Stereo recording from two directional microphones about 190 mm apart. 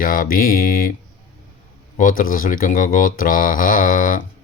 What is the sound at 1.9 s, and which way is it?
Speech, 45° left (ahead or behind).